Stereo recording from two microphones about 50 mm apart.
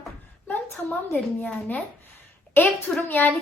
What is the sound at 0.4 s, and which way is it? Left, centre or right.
A child's voice, left.